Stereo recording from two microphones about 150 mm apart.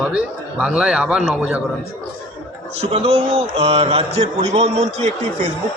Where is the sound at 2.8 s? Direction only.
40° right (ahead or behind).